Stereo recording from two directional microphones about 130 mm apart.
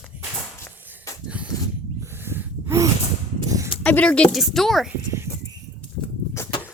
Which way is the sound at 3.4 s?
25° right (ahead or behind).